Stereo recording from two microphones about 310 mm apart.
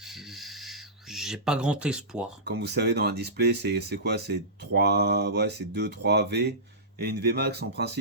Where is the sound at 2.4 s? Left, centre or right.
Right.